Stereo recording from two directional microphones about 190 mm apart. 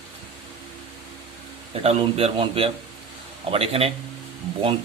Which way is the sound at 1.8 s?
30° right (ahead or behind).